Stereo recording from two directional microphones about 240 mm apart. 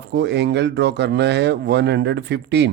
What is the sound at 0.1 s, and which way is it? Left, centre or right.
Speech, right.